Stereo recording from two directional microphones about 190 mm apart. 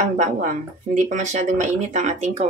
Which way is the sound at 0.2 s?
40° right (ahead or behind).